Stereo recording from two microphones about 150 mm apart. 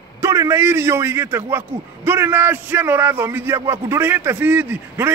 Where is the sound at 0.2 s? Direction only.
20° right (ahead or behind).